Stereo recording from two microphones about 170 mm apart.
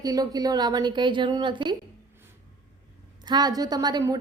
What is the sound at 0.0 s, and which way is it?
A woman's voice, 20° right (ahead or behind).